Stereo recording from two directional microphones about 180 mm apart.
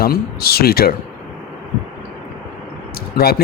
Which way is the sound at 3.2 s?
60° left (ahead or behind).